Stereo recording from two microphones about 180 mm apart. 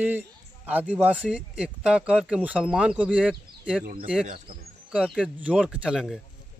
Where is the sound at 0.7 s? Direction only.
10° right (ahead or behind).